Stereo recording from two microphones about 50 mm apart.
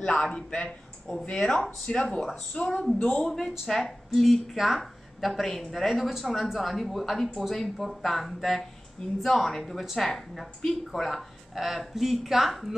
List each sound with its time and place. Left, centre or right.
0.0 s a man's voice: centre
0.7 s a man's voice: centre; by 3.3 s left
3.3 s speech: centre